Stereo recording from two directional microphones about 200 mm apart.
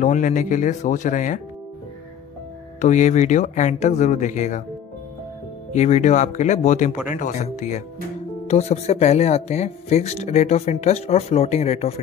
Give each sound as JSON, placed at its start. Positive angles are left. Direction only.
{"t": 0.0, "sound": "speech", "side_deg": 40}
{"t": 2.8, "sound": "speech", "side_deg": 35}
{"t": 5.7, "sound": "speech", "side_deg": 35}